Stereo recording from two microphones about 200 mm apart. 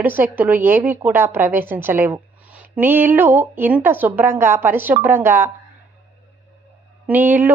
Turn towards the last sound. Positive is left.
turn(degrees=-10)  # may be behind; listen again after turning